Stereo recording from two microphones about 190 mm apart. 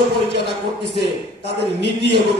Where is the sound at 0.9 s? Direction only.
65° left (ahead or behind).